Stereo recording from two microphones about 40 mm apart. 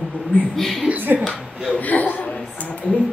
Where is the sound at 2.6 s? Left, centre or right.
Left.